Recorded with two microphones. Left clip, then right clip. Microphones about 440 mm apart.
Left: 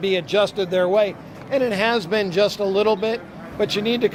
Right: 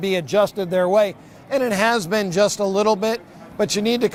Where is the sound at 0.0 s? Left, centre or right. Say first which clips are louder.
Right 1 dB; right.